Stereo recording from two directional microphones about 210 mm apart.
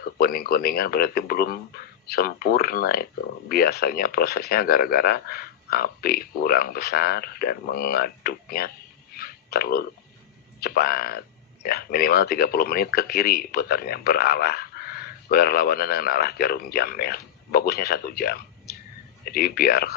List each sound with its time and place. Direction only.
0.2 s speech: 45° left (ahead or behind)